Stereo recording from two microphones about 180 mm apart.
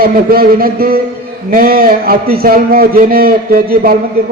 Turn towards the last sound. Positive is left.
turn(degrees=-55)  # may be behind; listen again after turning